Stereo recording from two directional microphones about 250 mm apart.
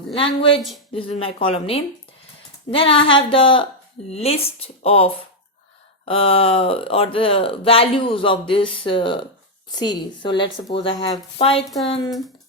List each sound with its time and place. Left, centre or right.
0.1 s speech: left